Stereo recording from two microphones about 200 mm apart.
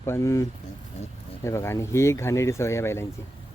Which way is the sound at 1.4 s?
15° left (ahead or behind).